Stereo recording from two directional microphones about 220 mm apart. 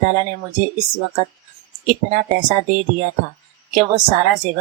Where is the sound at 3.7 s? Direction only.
35° right (ahead or behind).